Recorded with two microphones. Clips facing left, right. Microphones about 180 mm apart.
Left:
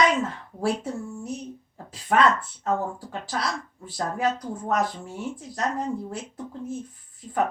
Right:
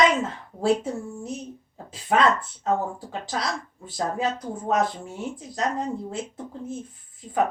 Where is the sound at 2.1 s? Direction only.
20° right (ahead or behind).